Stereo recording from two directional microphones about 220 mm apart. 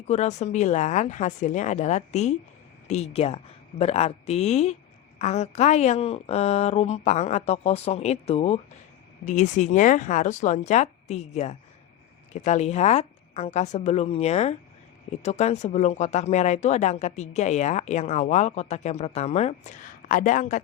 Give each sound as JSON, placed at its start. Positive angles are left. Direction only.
{"t": 0.1, "sound": "a woman's voice", "side_deg": 30}